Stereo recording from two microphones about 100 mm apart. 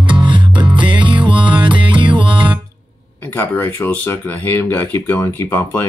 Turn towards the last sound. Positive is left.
turn(degrees=25)  # may be behind; listen again after turning